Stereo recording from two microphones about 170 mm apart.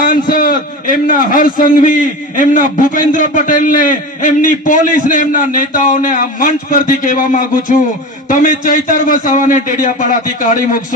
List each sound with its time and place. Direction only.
0.0 s a man's voice: 55° left (ahead or behind)